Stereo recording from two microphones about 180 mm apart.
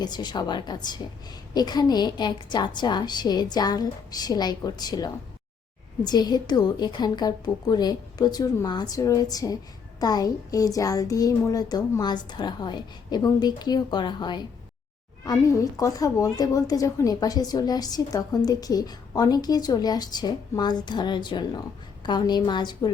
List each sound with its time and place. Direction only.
0.0 s a woman's voice: 25° left (ahead or behind)